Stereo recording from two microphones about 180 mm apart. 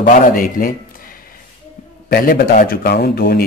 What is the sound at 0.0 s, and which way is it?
Speech, 45° left (ahead or behind).